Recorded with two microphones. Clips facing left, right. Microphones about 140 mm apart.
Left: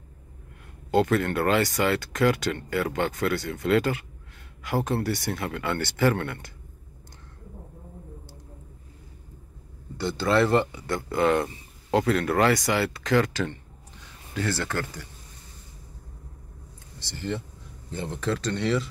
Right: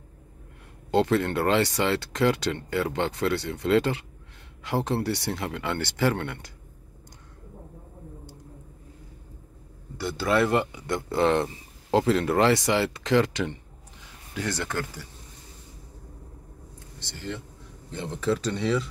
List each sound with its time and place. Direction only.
0.9 s speech: 25° right (ahead or behind)
9.9 s speech: 5° right (ahead or behind)
17.9 s speech: centre (ahead or behind)